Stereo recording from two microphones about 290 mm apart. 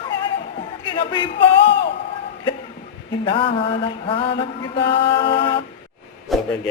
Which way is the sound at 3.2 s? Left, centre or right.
Centre.